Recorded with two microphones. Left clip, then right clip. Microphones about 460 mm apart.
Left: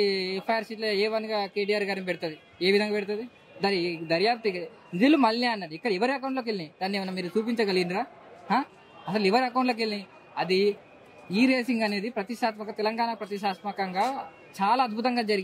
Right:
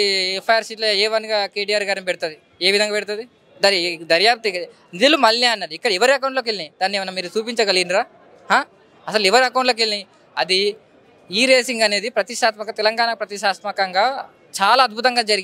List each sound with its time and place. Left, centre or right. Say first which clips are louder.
0.0 s speech: right 8 dB; right